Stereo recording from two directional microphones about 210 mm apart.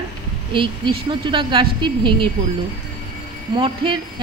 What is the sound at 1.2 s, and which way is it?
Speech, 20° right (ahead or behind).